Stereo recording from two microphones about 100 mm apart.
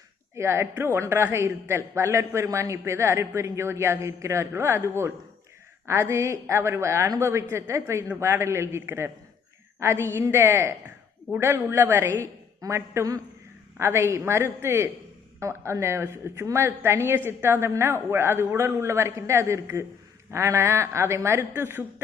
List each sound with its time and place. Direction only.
0.3 s a woman's voice: 25° right (ahead or behind)